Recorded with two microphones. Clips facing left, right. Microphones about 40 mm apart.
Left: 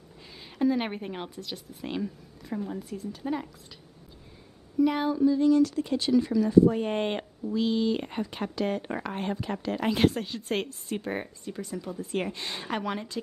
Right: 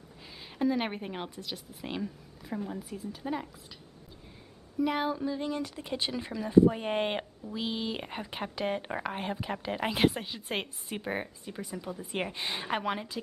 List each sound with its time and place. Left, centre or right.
0.6 s a woman's voice: centre
4.7 s a woman's voice: centre
5.2 s speech: right
6.7 s a woman's voice: centre